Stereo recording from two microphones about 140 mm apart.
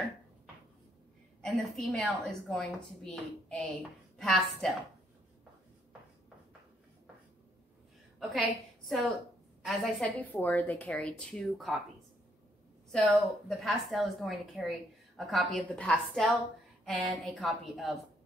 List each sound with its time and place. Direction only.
1.4 s a woman's voice: 5° left (ahead or behind)
8.2 s a woman's voice: centre (ahead or behind)
12.9 s a woman's voice: centre (ahead or behind)